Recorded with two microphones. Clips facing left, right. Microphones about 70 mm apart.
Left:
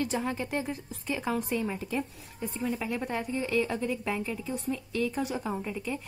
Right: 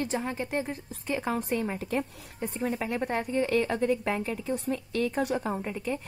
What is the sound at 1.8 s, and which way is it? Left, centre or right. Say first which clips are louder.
Speech: right 2 dB; right.